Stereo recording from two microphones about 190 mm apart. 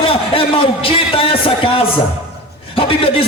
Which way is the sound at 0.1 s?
30° left (ahead or behind).